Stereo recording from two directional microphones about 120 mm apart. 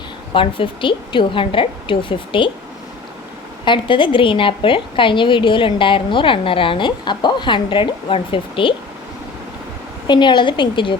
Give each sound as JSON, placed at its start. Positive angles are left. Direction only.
{"t": 0.3, "sound": "a woman's voice", "side_deg": 45}
{"t": 3.7, "sound": "a woman's voice", "side_deg": 45}
{"t": 10.1, "sound": "a woman's voice", "side_deg": 40}